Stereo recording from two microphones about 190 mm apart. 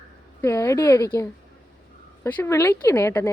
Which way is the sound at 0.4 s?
15° left (ahead or behind).